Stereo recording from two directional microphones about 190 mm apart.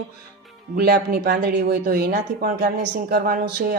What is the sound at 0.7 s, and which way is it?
Speech, 55° right (ahead or behind).